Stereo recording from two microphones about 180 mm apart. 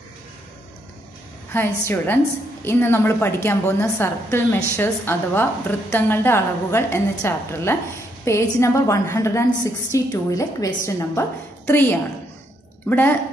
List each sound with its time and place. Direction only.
1.5 s a woman's voice: 10° left (ahead or behind)